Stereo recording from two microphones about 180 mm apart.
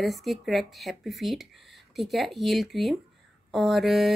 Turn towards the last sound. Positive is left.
turn(degrees=0)  # may be behind; listen again after turning